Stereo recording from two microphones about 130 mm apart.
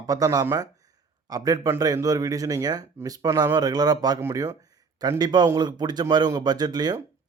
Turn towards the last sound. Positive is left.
turn(degrees=-30)  # may be behind; listen again after turning